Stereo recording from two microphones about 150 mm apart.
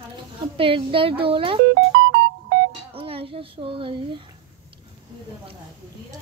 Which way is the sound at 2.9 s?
40° right (ahead or behind).